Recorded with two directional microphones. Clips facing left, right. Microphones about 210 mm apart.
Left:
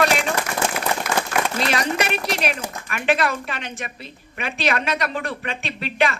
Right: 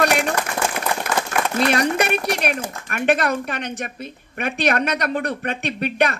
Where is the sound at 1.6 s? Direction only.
55° right (ahead or behind).